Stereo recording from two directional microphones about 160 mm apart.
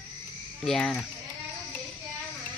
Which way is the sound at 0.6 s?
5° left (ahead or behind).